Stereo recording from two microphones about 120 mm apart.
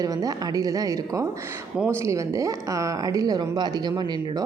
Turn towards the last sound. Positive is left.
turn(degrees=-35)  # may be behind; listen again after turning